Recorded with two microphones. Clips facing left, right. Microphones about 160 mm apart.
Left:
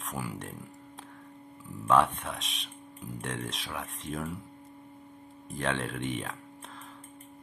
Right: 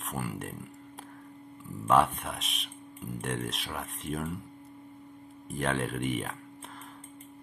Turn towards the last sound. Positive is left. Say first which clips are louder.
# right 2 dB
turn(degrees=-5)  # may be behind; listen again after turning